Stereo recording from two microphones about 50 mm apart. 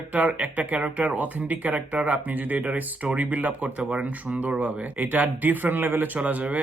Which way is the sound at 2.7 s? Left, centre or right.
Right.